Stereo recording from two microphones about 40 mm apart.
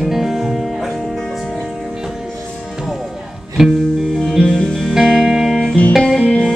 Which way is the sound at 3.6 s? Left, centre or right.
Centre.